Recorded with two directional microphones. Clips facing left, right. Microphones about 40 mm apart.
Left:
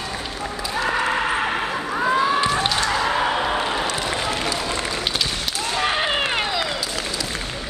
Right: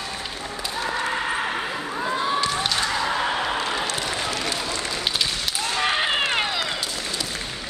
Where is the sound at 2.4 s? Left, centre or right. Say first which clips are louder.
Left 3 dB; left.